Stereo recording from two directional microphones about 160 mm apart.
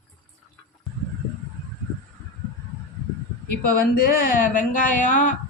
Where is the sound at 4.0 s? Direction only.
65° left (ahead or behind).